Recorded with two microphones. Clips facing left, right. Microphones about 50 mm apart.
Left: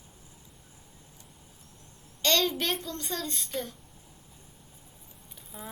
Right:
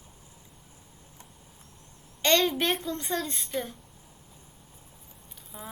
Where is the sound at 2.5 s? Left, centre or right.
Centre.